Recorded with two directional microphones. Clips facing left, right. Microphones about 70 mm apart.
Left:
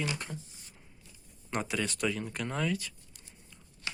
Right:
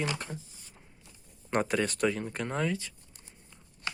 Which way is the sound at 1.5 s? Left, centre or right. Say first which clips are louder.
Right 5 dB; right.